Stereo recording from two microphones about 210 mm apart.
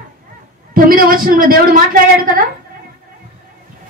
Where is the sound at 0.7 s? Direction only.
40° right (ahead or behind).